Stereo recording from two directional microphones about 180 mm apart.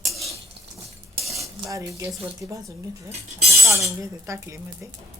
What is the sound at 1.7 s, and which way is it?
Speech, 15° right (ahead or behind).